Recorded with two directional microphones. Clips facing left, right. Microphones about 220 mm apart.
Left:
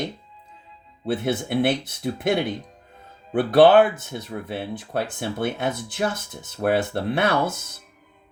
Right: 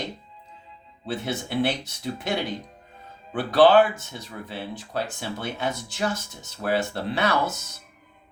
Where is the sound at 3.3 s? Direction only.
55° left (ahead or behind).